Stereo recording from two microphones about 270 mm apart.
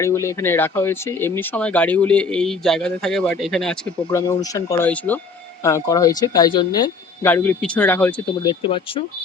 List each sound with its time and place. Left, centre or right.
0.0 s speech: centre
8.6 s speech: centre